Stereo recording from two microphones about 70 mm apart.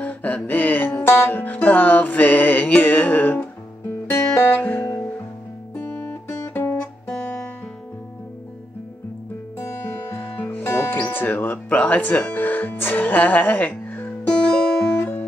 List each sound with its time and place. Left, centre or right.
0.0 s music: left
4.6 s guitar: left
5.8 s music: left
9.6 s music: left